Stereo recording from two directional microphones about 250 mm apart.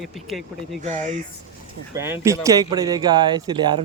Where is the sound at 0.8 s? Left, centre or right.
Right.